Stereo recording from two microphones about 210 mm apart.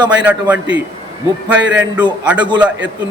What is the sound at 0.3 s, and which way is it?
Speech, 5° right (ahead or behind).